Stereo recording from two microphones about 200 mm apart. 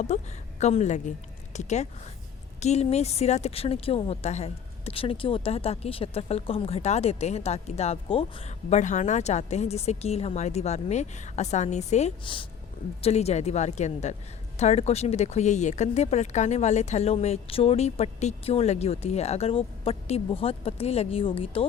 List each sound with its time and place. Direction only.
0.1 s speech: 35° left (ahead or behind)